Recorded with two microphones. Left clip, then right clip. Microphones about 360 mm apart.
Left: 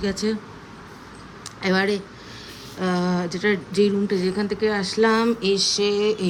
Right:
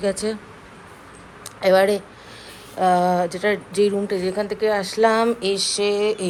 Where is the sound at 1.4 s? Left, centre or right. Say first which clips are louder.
Right 6 dB; centre.